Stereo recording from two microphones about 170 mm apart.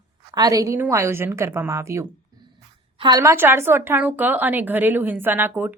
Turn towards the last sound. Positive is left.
turn(degrees=-10)  # may be behind; listen again after turning